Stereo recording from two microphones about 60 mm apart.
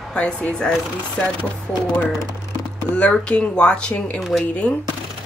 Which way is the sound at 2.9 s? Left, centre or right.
Centre.